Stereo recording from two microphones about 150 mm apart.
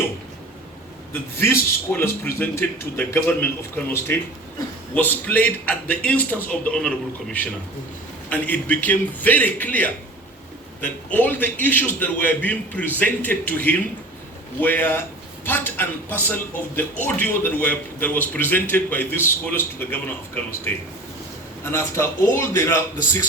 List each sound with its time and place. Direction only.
1.4 s a man's voice: 15° left (ahead or behind)